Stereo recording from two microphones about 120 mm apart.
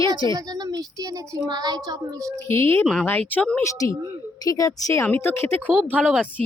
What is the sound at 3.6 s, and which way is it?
Speech, 25° left (ahead or behind).